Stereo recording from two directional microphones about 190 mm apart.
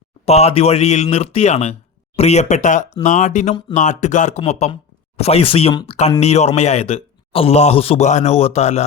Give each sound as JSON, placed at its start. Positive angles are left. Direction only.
{"t": 0.3, "sound": "a man's voice", "side_deg": 35}